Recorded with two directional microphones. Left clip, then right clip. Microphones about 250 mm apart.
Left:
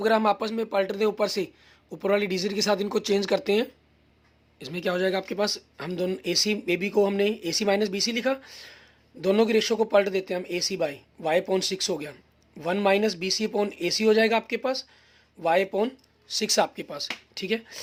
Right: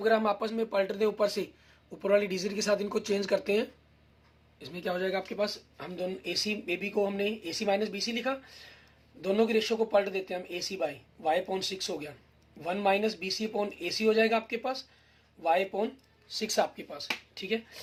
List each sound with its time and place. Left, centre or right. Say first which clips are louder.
0.0 s speech: left 4 dB; left